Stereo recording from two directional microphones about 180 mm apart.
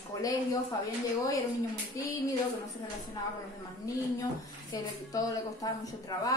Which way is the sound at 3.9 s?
20° left (ahead or behind).